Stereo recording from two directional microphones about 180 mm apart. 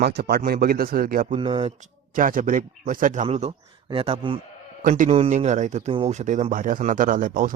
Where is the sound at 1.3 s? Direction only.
30° right (ahead or behind).